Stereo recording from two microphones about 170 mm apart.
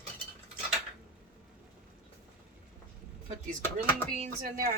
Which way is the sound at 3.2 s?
45° right (ahead or behind).